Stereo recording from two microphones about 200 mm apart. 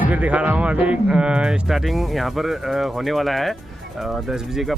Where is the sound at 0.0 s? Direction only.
5° right (ahead or behind).